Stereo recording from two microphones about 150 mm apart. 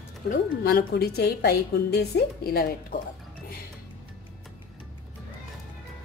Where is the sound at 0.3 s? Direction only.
90° left.